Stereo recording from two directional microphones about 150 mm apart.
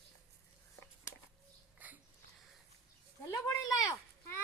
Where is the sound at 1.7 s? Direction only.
10° right (ahead or behind).